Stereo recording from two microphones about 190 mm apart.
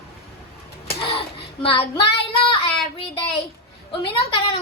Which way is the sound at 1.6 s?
30° left (ahead or behind).